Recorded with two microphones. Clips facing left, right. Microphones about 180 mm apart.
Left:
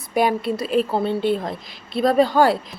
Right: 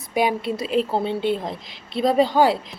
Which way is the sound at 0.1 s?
15° right (ahead or behind).